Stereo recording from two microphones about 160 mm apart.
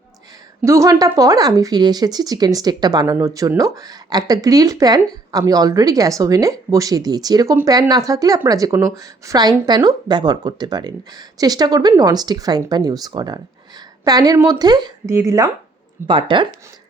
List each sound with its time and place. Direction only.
0.6 s a woman's voice: 20° right (ahead or behind)
16.0 s speech: 30° right (ahead or behind)